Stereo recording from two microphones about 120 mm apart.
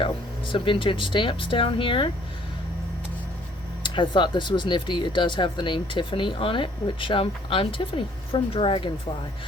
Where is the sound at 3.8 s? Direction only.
40° left (ahead or behind).